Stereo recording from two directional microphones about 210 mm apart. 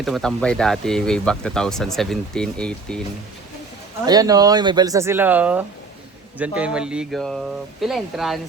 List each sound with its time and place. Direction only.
0.0 s speech: centre (ahead or behind)
4.0 s speech: 20° right (ahead or behind); by 8.4 s centre (ahead or behind)